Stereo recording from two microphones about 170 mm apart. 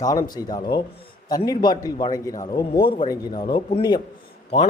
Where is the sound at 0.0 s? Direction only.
20° left (ahead or behind).